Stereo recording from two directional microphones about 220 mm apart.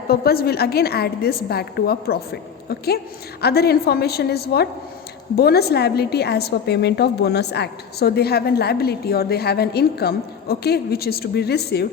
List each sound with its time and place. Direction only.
0.1 s a woman's voice: 45° left (ahead or behind)